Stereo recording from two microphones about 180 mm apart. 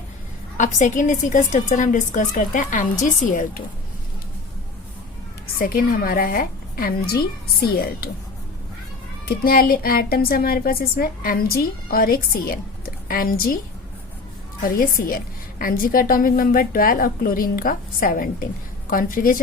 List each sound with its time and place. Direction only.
0.5 s a woman's voice: 45° left (ahead or behind)
5.5 s a woman's voice: 55° left (ahead or behind)
9.2 s a woman's voice: 55° left (ahead or behind)
14.6 s a woman's voice: 50° left (ahead or behind)